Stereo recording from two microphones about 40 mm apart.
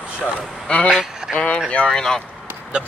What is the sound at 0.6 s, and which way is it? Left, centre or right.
Speech, left.